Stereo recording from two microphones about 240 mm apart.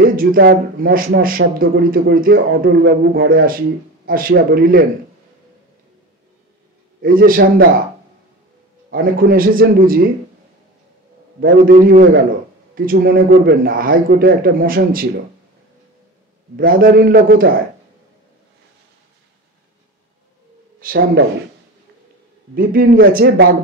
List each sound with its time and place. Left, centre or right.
0.0 s a man's voice: right
7.0 s a man's voice: right
8.9 s a man's voice: right
11.6 s a man's voice: right
16.5 s a man's voice: right
20.8 s a man's voice: right
22.6 s a man's voice: right